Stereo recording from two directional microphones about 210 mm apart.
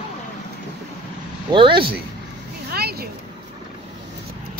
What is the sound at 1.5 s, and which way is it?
Speech, 25° right (ahead or behind).